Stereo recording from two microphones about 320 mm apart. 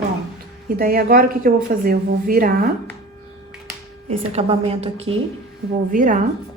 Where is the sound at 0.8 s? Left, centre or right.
Right.